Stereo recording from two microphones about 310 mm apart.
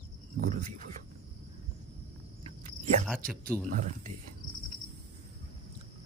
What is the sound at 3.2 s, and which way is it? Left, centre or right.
Speech, centre.